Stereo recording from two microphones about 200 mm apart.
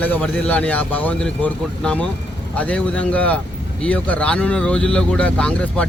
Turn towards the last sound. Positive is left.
turn(degrees=5)  # may be behind; listen again after turning